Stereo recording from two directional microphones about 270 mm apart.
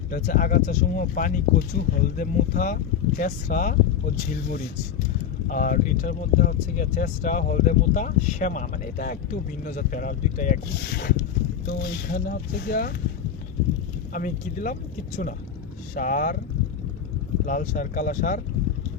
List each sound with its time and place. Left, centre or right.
0.1 s speech: left
14.1 s speech: left
17.4 s speech: left